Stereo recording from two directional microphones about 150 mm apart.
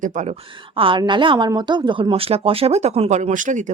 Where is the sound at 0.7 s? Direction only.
35° right (ahead or behind).